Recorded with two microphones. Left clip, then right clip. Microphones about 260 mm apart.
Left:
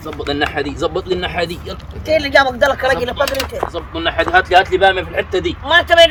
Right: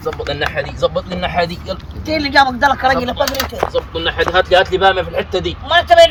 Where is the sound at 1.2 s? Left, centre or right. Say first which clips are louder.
Right 2 dB; centre.